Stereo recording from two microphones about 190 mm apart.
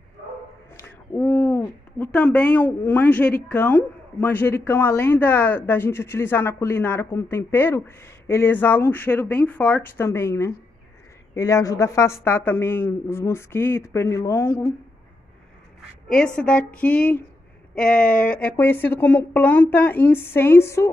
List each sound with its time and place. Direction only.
0.7 s speech: 10° left (ahead or behind)
16.3 s speech: 5° left (ahead or behind)